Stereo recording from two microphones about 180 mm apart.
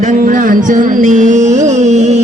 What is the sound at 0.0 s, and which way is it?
Music, 50° right (ahead or behind).